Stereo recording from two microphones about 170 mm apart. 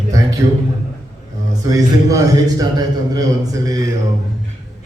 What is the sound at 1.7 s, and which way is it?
Speech, 20° right (ahead or behind).